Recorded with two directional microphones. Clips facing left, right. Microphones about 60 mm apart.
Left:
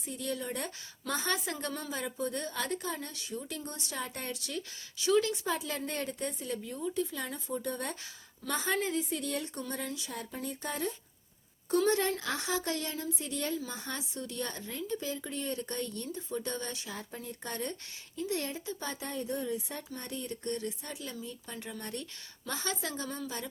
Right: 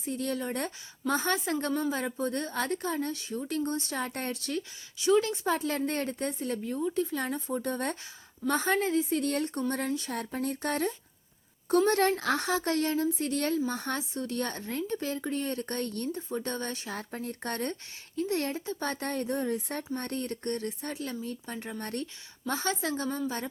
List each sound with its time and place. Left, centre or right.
0.1 s speech: right
4.9 s a woman's voice: right
8.4 s a woman's voice: right
11.9 s a woman's voice: right
13.2 s a woman's voice: right
16.3 s speech: right
17.2 s a woman's voice: right
18.8 s a woman's voice: right
22.4 s a woman's voice: right